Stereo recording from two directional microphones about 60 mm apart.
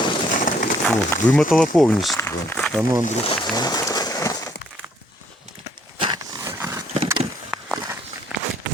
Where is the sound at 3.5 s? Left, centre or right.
Left.